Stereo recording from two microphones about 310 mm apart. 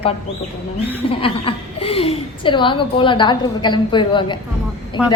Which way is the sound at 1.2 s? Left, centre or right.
Centre.